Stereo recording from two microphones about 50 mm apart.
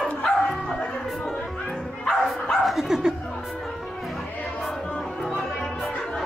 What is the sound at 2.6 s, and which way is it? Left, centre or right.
Dog, centre.